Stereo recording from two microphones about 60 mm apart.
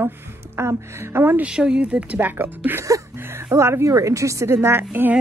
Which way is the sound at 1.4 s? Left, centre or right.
Centre.